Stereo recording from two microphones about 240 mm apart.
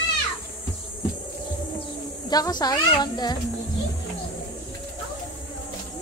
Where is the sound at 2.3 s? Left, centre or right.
Centre.